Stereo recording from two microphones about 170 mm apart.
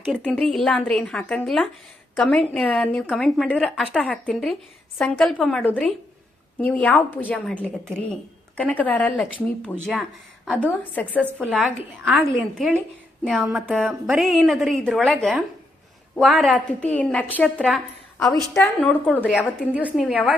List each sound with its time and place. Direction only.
0.2 s a woman's voice: 5° left (ahead or behind)